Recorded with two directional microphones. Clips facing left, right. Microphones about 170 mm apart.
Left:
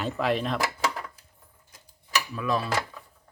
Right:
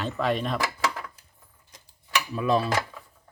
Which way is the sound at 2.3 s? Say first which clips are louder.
Right 5 dB; 30° right (ahead or behind).